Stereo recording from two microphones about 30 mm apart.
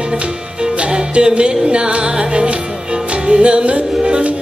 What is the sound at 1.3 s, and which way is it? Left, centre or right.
Music, right.